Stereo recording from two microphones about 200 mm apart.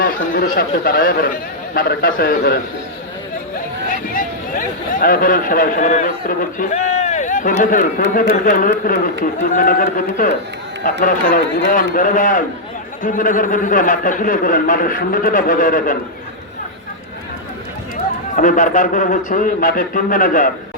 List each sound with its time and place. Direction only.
0.0 s speech: 45° left (ahead or behind)
3.8 s speech: 45° left (ahead or behind)
11.0 s speech: 40° left (ahead or behind)
17.9 s speech: 40° left (ahead or behind)